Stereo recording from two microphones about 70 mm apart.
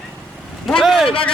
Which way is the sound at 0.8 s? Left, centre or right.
Centre.